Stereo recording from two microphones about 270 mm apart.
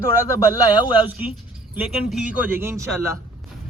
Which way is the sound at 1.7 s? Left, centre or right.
Centre.